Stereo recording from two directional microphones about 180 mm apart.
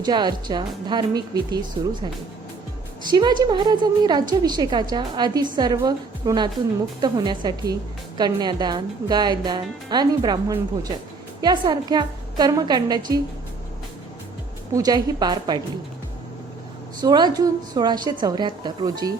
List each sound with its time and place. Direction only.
0.0 s a woman's voice: 25° right (ahead or behind)
3.1 s a woman's voice: 25° right (ahead or behind)
14.7 s a woman's voice: 20° right (ahead or behind)
17.0 s a woman's voice: 25° right (ahead or behind)